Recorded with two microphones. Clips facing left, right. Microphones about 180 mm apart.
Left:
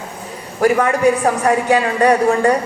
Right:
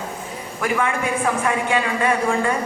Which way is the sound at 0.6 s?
40° left (ahead or behind).